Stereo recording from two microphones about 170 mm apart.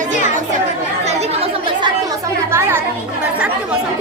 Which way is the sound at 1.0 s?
40° right (ahead or behind).